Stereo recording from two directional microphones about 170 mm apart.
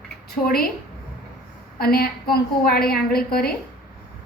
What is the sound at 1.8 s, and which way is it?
A woman's voice, 60° left (ahead or behind).